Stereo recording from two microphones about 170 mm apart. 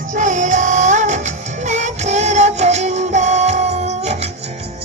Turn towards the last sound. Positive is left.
turn(degrees=-40)  # may be behind; listen again after turning